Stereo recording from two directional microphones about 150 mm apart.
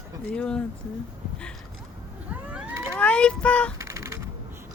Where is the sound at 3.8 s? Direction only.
20° right (ahead or behind).